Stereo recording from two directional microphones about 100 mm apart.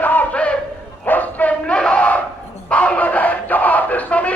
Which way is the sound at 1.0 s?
15° left (ahead or behind).